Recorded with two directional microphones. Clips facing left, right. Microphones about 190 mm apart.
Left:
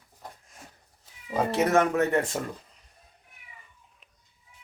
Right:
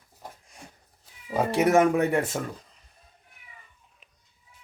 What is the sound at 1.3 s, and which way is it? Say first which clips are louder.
Speech: right 2 dB; 10° right (ahead or behind).